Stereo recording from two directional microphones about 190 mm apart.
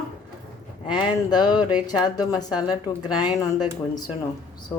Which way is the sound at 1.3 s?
20° left (ahead or behind).